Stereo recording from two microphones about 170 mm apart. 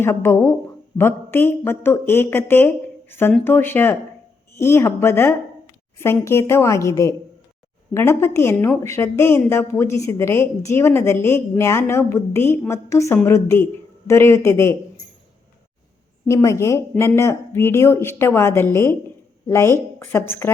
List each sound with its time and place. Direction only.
0.0 s a woman's voice: 15° left (ahead or behind)
16.3 s a woman's voice: 20° left (ahead or behind)